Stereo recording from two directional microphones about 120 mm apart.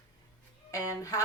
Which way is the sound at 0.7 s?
25° left (ahead or behind).